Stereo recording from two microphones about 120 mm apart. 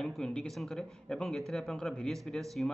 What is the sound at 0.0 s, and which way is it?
Speech, 5° left (ahead or behind).